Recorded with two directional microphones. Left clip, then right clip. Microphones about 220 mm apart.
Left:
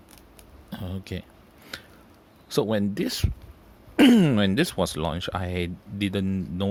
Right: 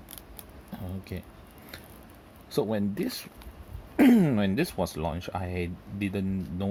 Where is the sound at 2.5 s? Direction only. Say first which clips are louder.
Left 4 dB; 40° left (ahead or behind).